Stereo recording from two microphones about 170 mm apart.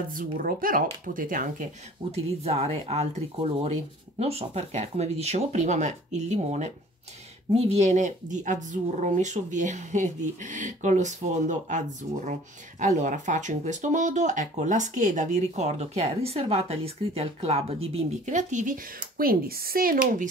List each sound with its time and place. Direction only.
0.1 s speech: 55° right (ahead or behind)
2.1 s speech: 35° right (ahead or behind); by 20.2 s 55° right (ahead or behind)